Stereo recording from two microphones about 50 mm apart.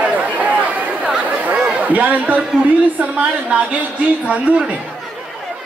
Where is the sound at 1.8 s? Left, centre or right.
Right.